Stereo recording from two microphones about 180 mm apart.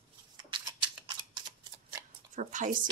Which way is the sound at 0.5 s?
25° right (ahead or behind).